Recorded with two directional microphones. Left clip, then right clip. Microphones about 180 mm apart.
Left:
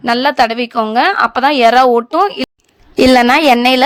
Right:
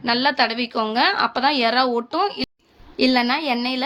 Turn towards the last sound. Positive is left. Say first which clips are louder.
# left 13 dB
turn(degrees=60)  # may be behind; listen again after turning